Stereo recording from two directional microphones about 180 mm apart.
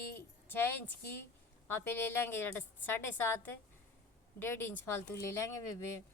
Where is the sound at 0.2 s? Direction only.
10° left (ahead or behind).